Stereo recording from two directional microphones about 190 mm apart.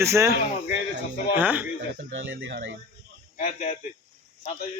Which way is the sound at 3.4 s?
40° left (ahead or behind).